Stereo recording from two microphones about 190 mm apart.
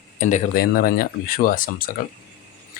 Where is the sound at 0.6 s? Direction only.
50° left (ahead or behind).